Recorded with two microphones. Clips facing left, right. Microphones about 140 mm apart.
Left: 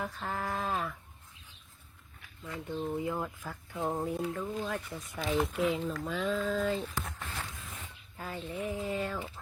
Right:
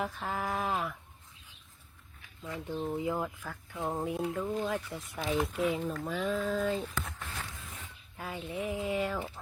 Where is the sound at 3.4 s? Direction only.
5° left (ahead or behind).